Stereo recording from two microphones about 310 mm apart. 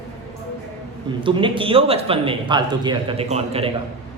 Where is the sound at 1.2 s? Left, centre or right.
Centre.